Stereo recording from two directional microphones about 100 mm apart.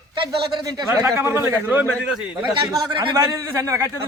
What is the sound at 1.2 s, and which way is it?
Speech, 25° right (ahead or behind).